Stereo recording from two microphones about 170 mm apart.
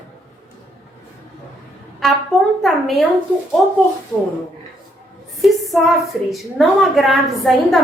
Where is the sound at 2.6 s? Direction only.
Centre (ahead or behind).